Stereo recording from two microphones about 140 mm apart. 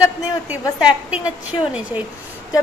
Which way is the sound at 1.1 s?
10° right (ahead or behind).